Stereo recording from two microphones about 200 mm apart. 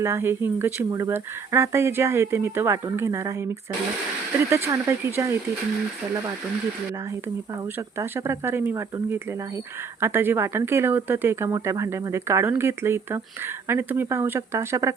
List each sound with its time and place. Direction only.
0.0 s speech: 10° right (ahead or behind)
4.4 s speech: 15° right (ahead or behind)
7.8 s speech: 15° right (ahead or behind)